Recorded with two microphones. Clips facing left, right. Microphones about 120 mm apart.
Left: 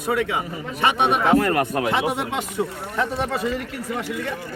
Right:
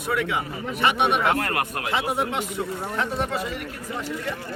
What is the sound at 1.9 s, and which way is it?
Speech, 80° left.